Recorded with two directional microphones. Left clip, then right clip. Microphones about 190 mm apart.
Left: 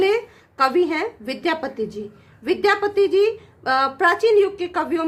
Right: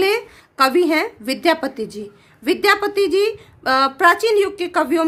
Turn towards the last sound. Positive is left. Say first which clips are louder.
# right 5 dB
turn(degrees=-35)  # may be behind; listen again after turning